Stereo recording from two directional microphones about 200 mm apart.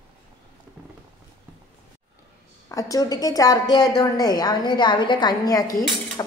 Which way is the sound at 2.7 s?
15° left (ahead or behind).